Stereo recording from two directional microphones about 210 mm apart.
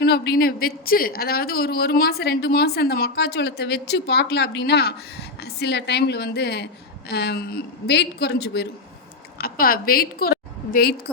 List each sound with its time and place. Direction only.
0.0 s a man's voice: 50° left (ahead or behind)